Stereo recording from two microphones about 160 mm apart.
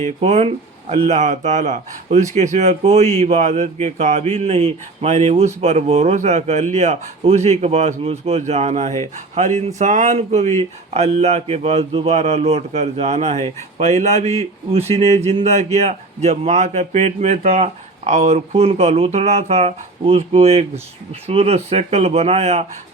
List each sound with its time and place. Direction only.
0.0 s speech: 45° right (ahead or behind)